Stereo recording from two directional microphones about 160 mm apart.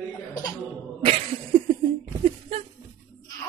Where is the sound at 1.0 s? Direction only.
35° right (ahead or behind).